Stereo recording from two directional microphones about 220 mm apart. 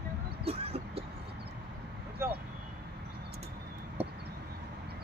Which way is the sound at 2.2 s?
10° right (ahead or behind).